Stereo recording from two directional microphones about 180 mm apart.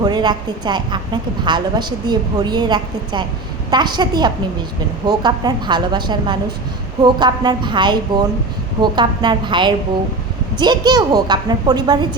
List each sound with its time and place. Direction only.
0.0 s a woman's voice: 25° right (ahead or behind)